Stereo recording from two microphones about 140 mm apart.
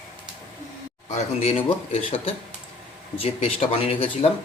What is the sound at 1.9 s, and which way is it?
Speech, 40° left (ahead or behind).